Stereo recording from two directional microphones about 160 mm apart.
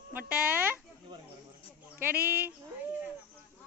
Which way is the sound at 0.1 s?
10° right (ahead or behind).